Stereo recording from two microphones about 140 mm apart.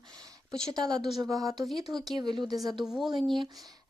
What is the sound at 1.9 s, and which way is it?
Speech, centre (ahead or behind).